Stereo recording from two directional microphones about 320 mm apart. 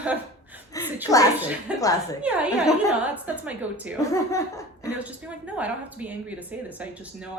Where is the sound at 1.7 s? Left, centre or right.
Centre.